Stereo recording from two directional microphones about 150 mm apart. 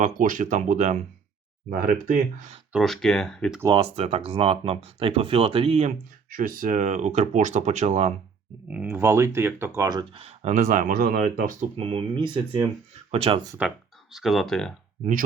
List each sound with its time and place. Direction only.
0.0 s speech: 60° right (ahead or behind)
2.7 s speech: centre (ahead or behind)
3.8 s speech: 40° right (ahead or behind)
6.3 s speech: 65° right (ahead or behind); by 8.1 s 50° right (ahead or behind)
8.6 s speech: 10° right (ahead or behind)
10.2 s speech: 45° right (ahead or behind); by 11.2 s 80° right
11.2 s speech: 60° right (ahead or behind)
11.8 s speech: 35° right (ahead or behind)
13.6 s speech: 5° right (ahead or behind)